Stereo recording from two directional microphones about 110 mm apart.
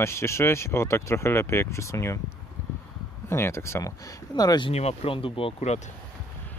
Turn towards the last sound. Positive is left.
turn(degrees=65)  # may be behind; listen again after turning